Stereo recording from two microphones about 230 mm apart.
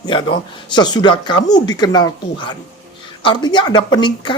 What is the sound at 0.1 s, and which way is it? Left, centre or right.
Speech, left.